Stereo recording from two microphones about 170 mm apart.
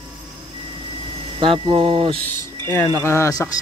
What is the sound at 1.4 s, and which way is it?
Speech, 30° right (ahead or behind).